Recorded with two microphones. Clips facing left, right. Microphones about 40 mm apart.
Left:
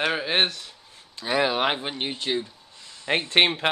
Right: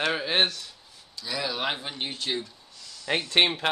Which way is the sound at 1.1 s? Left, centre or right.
Left.